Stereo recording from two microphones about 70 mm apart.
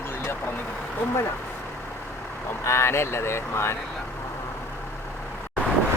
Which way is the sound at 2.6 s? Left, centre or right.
Left.